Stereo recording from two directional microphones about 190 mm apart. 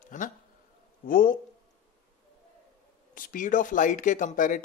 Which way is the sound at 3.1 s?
45° left (ahead or behind).